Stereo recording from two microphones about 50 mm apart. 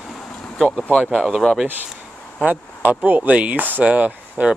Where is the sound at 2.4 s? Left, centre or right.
Right.